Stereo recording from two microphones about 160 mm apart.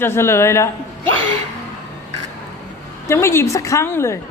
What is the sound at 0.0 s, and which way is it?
Speech, 15° left (ahead or behind).